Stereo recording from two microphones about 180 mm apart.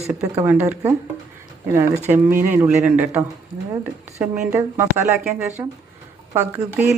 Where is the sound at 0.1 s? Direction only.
10° right (ahead or behind).